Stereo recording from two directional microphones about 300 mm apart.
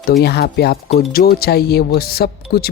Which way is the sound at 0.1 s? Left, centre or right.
Left.